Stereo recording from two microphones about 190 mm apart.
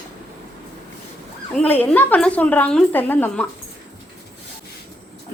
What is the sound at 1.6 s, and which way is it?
A woman's voice, 5° left (ahead or behind).